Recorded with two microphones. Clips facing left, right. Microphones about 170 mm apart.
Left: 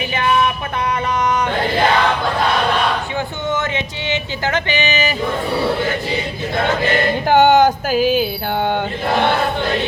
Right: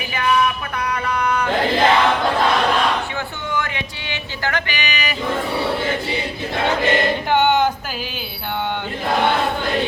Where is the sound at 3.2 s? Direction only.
20° left (ahead or behind).